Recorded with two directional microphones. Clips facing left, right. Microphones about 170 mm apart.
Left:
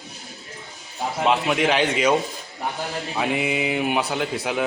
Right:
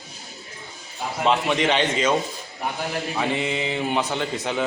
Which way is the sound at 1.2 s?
5° left (ahead or behind).